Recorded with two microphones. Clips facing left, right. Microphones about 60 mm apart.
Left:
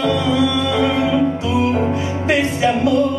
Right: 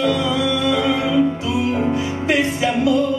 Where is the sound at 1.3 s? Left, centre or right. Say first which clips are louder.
Left 3 dB; left.